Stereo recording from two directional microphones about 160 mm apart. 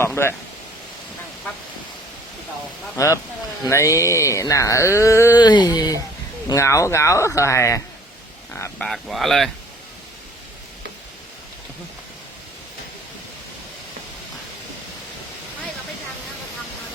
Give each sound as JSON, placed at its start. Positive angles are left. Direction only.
{"t": 0.2, "sound": "speech", "side_deg": 15}
{"t": 2.9, "sound": "speech", "side_deg": 20}
{"t": 8.8, "sound": "speech", "side_deg": 0}